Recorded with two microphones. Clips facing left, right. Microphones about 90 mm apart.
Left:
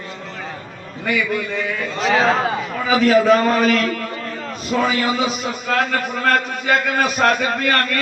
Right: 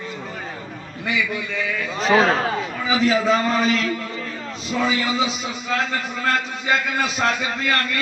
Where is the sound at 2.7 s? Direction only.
55° left (ahead or behind).